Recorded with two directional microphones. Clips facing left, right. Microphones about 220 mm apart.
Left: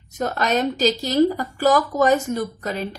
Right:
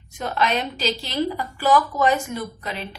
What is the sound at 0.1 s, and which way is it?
A woman's voice, 45° left (ahead or behind).